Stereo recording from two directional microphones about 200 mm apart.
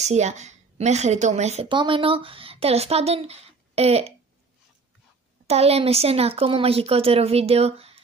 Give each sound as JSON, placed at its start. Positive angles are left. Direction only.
{"t": 0.0, "sound": "a woman's voice", "side_deg": -35}
{"t": 5.5, "sound": "speech", "side_deg": -30}